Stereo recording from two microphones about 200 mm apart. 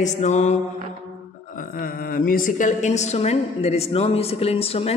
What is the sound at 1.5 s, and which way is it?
A man's voice, 45° left (ahead or behind).